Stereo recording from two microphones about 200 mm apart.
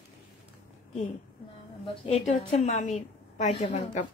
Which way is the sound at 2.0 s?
35° left (ahead or behind).